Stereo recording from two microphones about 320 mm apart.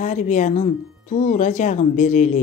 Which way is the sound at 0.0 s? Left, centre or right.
Left.